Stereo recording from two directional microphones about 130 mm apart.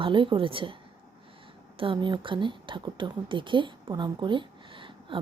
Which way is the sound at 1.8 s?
40° right (ahead or behind).